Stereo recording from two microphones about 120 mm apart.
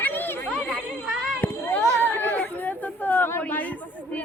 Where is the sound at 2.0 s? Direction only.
15° left (ahead or behind).